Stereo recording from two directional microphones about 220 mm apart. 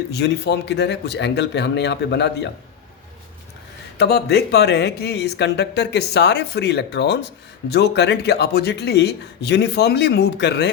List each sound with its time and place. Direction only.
0.1 s speech: 50° left (ahead or behind)
3.9 s speech: 50° left (ahead or behind)